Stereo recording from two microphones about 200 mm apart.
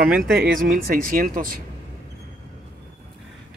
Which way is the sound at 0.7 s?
45° right (ahead or behind).